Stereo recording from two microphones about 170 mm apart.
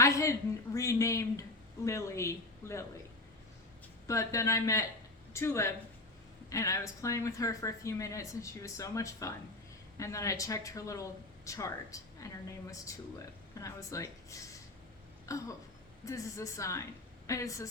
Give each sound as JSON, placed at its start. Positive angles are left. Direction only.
{"t": 0.0, "sound": "a woman's voice", "side_deg": 20}
{"t": 4.0, "sound": "a woman's voice", "side_deg": 20}
{"t": 13.6, "sound": "speech", "side_deg": 20}